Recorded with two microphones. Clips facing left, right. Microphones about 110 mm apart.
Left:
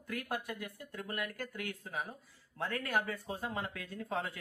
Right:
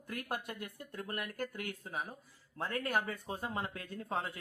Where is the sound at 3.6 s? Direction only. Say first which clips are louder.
Even; 30° right (ahead or behind).